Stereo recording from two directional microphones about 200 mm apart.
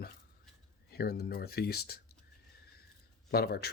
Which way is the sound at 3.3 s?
50° left (ahead or behind).